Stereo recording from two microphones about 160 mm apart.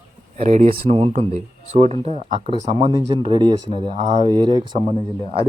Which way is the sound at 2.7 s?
25° right (ahead or behind).